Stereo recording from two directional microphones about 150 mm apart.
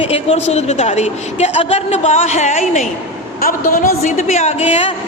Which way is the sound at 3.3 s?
80° left.